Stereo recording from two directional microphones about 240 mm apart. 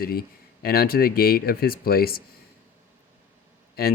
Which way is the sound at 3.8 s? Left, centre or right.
Left.